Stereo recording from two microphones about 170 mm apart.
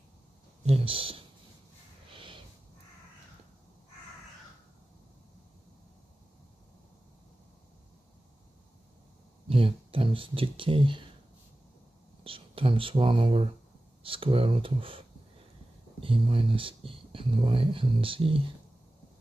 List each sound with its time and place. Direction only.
0.7 s speech: 30° right (ahead or behind)
2.1 s a sound: 30° right (ahead or behind)
9.5 s speech: 30° right (ahead or behind)
12.2 s speech: 30° right (ahead or behind)